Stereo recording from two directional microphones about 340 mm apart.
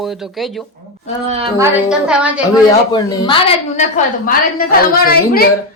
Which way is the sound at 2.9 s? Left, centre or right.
Centre.